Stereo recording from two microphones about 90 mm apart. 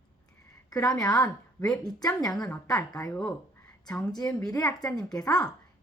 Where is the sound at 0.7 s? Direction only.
40° left (ahead or behind).